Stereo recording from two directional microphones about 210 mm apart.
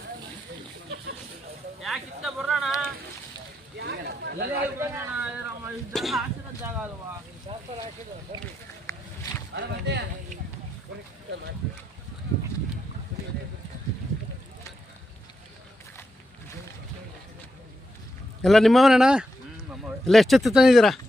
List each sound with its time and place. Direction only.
1.8 s speech: centre (ahead or behind)
3.8 s a sound: 50° right (ahead or behind)
4.8 s speech: 10° right (ahead or behind)
7.5 s speech: 25° right (ahead or behind)
8.9 s a sound: 15° left (ahead or behind)
9.6 s speech: 55° right (ahead or behind)
18.4 s speech: centre (ahead or behind)